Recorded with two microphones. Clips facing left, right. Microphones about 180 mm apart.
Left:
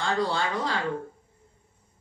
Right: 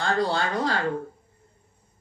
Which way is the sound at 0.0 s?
45° right (ahead or behind).